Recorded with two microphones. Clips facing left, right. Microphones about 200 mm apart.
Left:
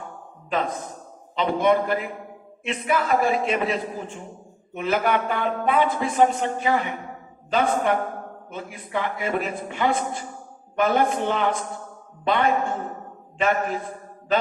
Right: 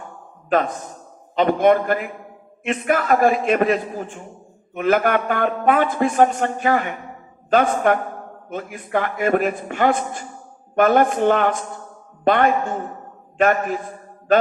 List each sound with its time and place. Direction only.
1.4 s a man's voice: 50° right (ahead or behind)